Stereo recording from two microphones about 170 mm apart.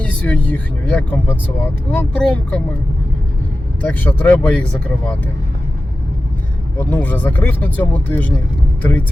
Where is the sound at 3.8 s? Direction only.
10° left (ahead or behind).